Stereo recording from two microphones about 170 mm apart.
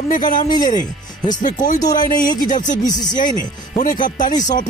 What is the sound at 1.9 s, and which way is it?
Speech, 55° left (ahead or behind).